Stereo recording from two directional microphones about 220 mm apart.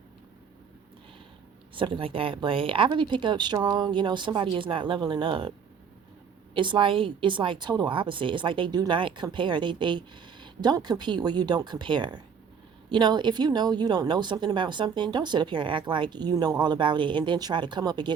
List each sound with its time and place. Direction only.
1.7 s a woman's voice: 25° right (ahead or behind)